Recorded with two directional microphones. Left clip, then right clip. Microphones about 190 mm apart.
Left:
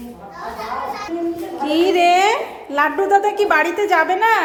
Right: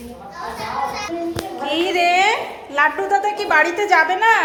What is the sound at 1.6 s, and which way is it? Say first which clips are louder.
A woman's voice: left 3 dB; 30° left (ahead or behind).